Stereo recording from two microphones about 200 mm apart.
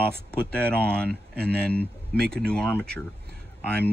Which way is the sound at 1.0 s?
50° right (ahead or behind).